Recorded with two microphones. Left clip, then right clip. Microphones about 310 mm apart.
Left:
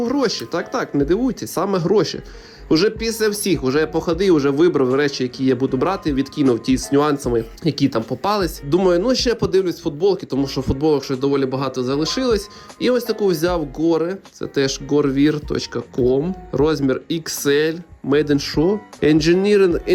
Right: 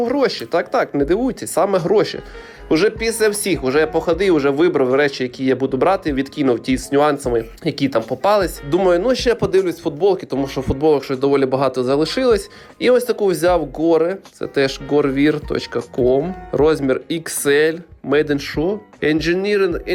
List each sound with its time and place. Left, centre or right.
0.0 s speech: centre